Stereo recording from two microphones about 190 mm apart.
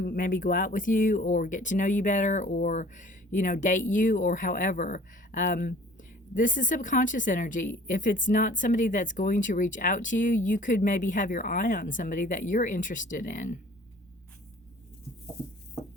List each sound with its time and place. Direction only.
0.0 s speech: 45° left (ahead or behind)